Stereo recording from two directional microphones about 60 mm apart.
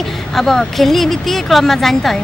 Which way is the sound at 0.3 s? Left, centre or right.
Centre.